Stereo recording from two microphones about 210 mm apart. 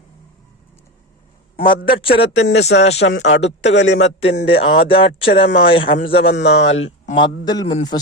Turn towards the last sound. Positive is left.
turn(degrees=20)  # may be behind; listen again after turning